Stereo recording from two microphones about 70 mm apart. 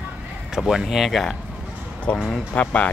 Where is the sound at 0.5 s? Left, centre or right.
Centre.